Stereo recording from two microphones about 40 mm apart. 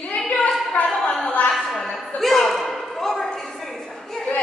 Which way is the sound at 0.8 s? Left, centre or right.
Left.